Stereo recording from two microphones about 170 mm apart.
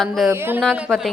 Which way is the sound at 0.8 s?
Centre (ahead or behind).